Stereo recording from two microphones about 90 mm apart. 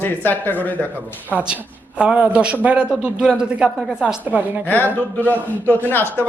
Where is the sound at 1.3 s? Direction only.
10° right (ahead or behind).